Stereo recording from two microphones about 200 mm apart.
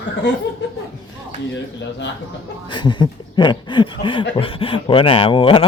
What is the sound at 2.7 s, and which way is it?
Chuckle, 25° left (ahead or behind).